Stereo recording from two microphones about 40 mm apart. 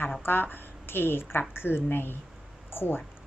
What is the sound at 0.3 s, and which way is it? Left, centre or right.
Speech, left.